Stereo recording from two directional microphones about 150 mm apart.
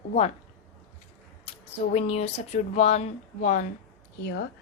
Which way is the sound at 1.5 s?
45° left (ahead or behind).